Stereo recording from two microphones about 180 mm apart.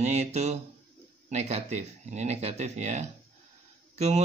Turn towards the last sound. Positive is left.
turn(degrees=-35)  # may be behind; listen again after turning